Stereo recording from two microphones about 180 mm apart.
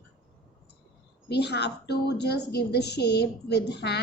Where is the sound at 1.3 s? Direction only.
70° left (ahead or behind).